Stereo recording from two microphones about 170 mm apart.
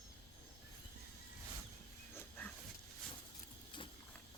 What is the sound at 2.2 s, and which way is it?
Dog, 10° left (ahead or behind).